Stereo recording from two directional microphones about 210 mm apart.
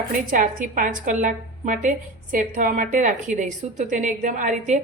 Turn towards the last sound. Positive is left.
turn(degrees=-35)  # may be behind; listen again after turning